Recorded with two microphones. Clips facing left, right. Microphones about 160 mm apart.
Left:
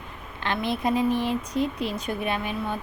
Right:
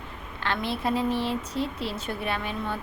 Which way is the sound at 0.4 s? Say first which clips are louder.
Left 2 dB; 15° left (ahead or behind).